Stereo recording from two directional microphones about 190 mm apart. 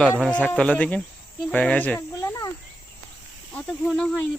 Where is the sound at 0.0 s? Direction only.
5° left (ahead or behind).